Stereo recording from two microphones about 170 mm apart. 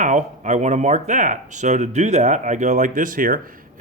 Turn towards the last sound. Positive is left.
turn(degrees=-55)  # may be behind; listen again after turning